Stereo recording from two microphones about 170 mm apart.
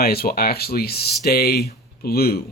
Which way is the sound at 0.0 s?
65° left (ahead or behind).